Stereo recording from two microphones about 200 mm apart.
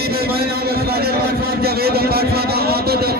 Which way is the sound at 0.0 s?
50° right (ahead or behind).